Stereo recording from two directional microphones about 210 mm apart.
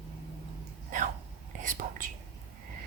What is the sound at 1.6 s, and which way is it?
Whispering, 40° right (ahead or behind).